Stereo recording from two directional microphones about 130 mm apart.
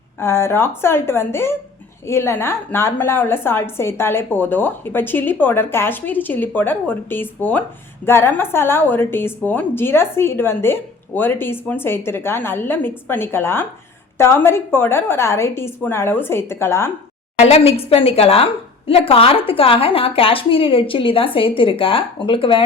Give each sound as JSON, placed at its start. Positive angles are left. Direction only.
{"t": 0.2, "sound": "a woman's voice", "side_deg": 20}
{"t": 17.3, "sound": "a woman's voice", "side_deg": 55}